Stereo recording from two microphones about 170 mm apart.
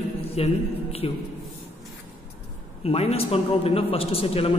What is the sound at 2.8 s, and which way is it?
A woman's voice, 35° left (ahead or behind).